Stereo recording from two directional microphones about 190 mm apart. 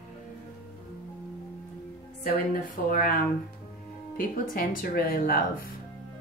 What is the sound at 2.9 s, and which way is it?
Speech, 45° left (ahead or behind).